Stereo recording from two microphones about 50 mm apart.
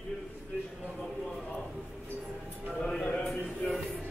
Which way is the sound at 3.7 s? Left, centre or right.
Centre.